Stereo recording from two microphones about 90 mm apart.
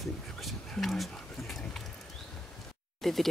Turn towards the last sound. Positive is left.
turn(degrees=0)  # may be behind; listen again after turning